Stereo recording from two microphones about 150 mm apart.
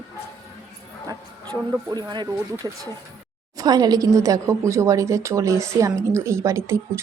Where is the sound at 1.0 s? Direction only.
25° right (ahead or behind).